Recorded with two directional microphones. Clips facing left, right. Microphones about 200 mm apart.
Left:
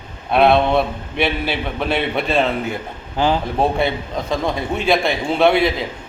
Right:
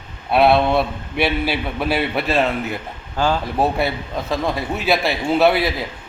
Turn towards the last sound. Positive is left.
turn(degrees=-5)  # may be behind; listen again after turning